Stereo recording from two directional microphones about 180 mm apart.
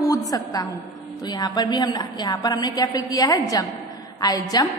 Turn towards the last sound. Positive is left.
turn(degrees=20)  # may be behind; listen again after turning